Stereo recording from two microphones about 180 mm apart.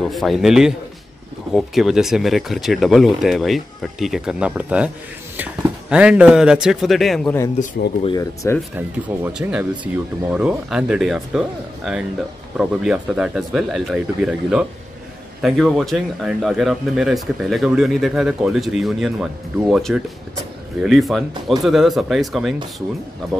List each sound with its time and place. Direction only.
0.0 s speech: centre (ahead or behind)
8.0 s speech: 20° left (ahead or behind)
8.7 s speech: 10° right (ahead or behind)